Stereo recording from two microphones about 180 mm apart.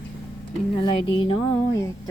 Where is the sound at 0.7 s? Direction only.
25° left (ahead or behind).